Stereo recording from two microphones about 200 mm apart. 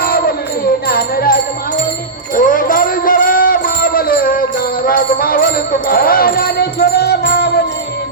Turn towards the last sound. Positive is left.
turn(degrees=55)  # may be behind; listen again after turning